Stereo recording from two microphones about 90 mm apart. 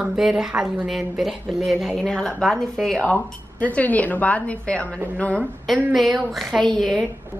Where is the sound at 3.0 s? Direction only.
15° left (ahead or behind).